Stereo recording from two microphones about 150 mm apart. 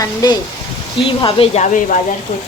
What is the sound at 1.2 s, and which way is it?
Speech, 40° left (ahead or behind).